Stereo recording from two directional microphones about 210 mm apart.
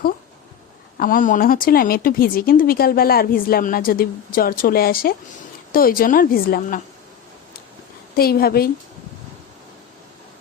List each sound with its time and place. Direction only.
0.9 s speech: 40° left (ahead or behind)
8.1 s speech: 45° left (ahead or behind)